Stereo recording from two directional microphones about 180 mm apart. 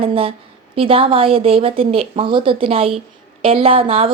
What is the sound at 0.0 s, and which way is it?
A woman's voice, 30° right (ahead or behind).